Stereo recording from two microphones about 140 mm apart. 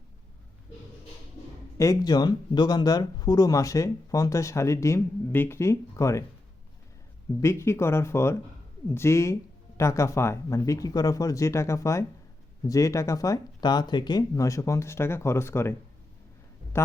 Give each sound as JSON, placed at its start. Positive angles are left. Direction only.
{"t": 1.8, "sound": "speech", "side_deg": 25}
{"t": 7.4, "sound": "speech", "side_deg": 20}
{"t": 16.7, "sound": "speech", "side_deg": 15}